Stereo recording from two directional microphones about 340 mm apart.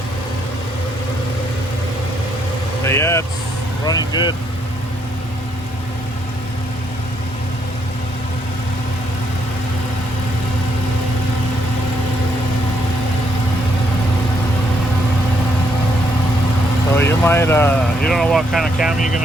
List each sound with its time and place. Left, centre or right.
2.8 s speech: centre
16.9 s speech: centre
18.9 s speech: left